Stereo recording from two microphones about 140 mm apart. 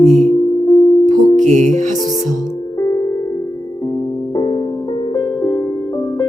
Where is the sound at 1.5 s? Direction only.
60° right (ahead or behind).